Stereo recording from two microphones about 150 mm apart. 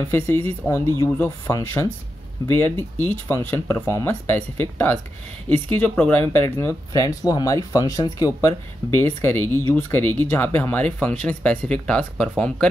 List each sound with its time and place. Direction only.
0.1 s speech: 15° left (ahead or behind)